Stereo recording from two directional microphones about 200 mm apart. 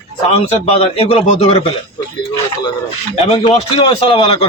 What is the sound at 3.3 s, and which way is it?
A man's voice, 25° left (ahead or behind).